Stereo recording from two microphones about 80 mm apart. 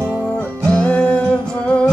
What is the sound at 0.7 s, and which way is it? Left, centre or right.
Music, centre.